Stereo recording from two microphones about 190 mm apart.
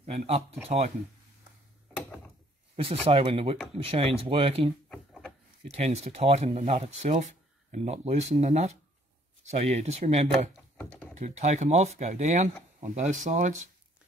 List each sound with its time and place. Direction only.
0.0 s speech: 35° right (ahead or behind)
2.7 s speech: 30° right (ahead or behind)
4.8 s a sound: 5° left (ahead or behind)
5.7 s speech: 35° right (ahead or behind)
10.8 s typing: 10° left (ahead or behind)
11.1 s speech: 40° right (ahead or behind)